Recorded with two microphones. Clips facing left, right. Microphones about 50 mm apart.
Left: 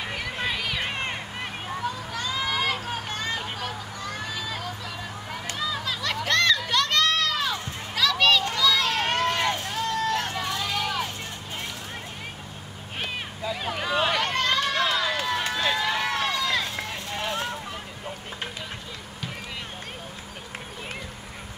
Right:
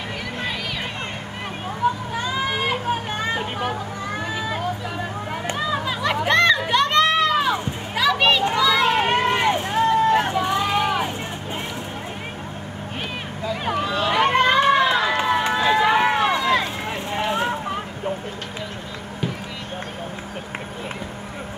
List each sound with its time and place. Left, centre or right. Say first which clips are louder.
0.4 s a sound: even; centre
2.1 s vehicle: right 4 dB; right
14.1 s run: right 8 dB; right